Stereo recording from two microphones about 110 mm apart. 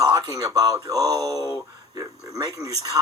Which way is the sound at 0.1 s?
35° right (ahead or behind).